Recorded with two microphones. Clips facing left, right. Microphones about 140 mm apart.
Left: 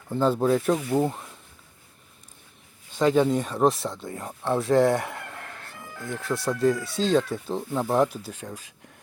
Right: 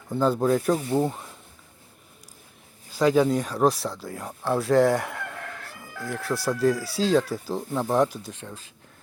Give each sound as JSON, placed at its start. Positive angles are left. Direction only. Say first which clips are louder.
{"t": 0.1, "sound": "speech", "louder": "even", "side_deg": 0}
{"t": 2.9, "sound": "speech", "louder": "right 1 dB", "side_deg": 0}